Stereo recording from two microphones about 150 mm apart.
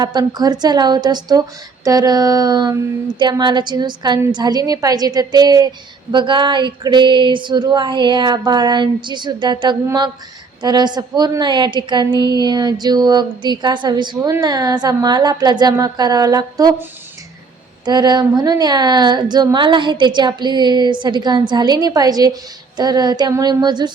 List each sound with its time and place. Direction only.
0.0 s a woman's voice: 30° right (ahead or behind)
17.8 s a woman's voice: 30° right (ahead or behind)